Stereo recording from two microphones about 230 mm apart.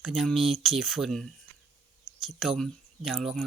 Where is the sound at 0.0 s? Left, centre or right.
Centre.